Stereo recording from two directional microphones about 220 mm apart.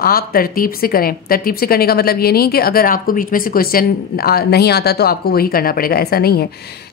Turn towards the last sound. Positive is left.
turn(degrees=45)  # may be behind; listen again after turning